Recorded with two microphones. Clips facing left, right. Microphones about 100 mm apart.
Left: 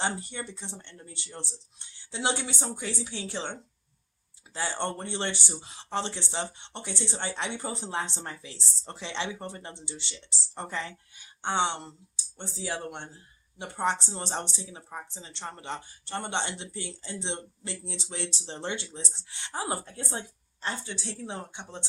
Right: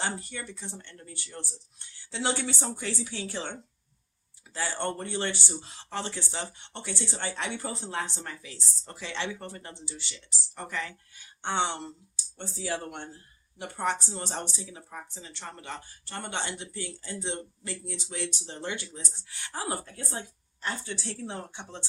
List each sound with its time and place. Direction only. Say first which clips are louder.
0.0 s speech: left 2 dB; 25° left (ahead or behind)
4.5 s speech: even; 20° left (ahead or behind)